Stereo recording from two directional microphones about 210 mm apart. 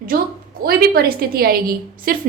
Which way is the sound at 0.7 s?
45° right (ahead or behind).